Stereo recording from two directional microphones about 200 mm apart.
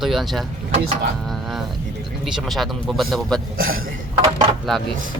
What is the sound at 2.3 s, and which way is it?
Speech, centre (ahead or behind).